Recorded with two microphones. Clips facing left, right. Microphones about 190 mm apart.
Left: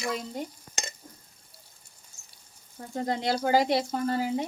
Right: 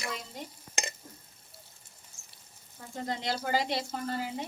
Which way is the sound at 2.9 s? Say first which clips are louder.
Left 6 dB; 45° left (ahead or behind).